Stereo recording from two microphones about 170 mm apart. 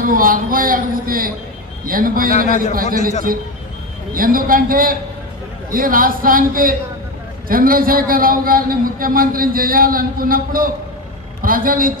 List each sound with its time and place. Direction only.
0.0 s a man's voice: 55° right (ahead or behind)
4.1 s a man's voice: 55° right (ahead or behind)